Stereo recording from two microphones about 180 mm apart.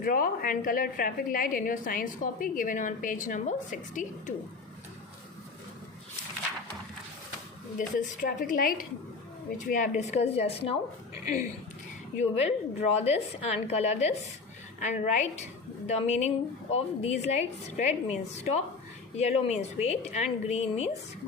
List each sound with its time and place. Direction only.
0.0 s a woman's voice: 50° left (ahead or behind)
7.8 s a woman's voice: 45° left (ahead or behind)
12.4 s a woman's voice: 35° left (ahead or behind)